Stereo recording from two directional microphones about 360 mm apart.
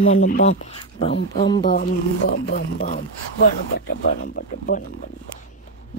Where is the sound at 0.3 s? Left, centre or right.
Centre.